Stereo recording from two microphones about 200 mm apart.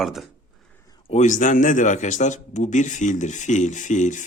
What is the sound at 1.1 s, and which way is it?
Speech, 35° left (ahead or behind).